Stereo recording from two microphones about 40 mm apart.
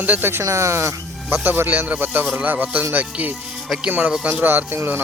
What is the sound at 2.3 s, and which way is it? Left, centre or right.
Music, right.